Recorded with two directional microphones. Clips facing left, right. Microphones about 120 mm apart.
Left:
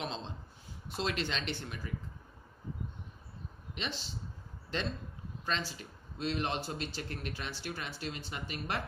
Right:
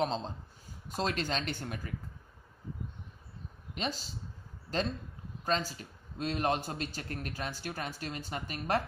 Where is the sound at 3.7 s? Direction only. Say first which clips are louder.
Right 4 dB; 40° right (ahead or behind).